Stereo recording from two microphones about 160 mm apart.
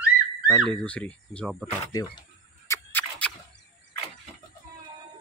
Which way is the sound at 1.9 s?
25° left (ahead or behind).